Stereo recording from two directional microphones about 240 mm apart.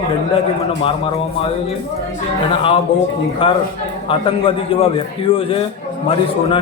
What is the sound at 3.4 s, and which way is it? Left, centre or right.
A man's voice, left.